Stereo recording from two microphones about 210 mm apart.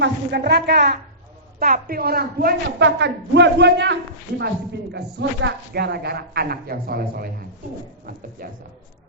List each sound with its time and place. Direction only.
0.0 s speech: 55° right (ahead or behind)